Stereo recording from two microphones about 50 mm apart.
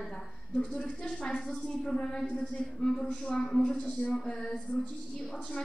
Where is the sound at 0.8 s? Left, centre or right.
Left.